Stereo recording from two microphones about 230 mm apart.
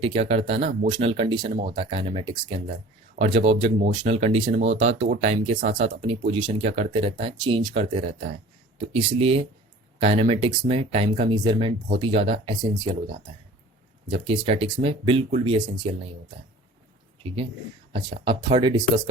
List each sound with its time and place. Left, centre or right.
0.0 s speech: right
4.6 s speech: right
5.0 s speech: right
18.4 s speech: right